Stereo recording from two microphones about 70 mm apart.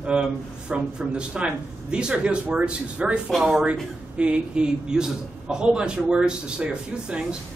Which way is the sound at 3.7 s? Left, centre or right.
Centre.